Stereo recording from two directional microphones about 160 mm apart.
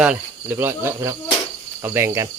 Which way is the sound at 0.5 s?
15° right (ahead or behind).